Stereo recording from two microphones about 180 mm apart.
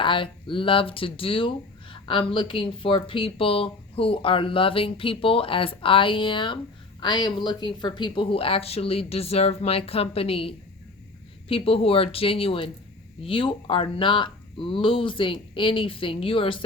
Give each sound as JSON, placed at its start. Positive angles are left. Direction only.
{"t": 0.0, "sound": "speech", "side_deg": 30}